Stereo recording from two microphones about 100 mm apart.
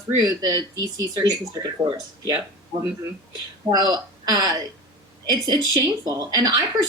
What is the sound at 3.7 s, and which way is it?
Speech, 45° right (ahead or behind).